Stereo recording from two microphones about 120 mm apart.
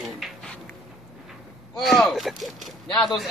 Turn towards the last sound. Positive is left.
turn(degrees=0)  # may be behind; listen again after turning